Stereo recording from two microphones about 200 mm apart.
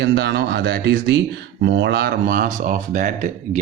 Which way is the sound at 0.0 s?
55° right (ahead or behind).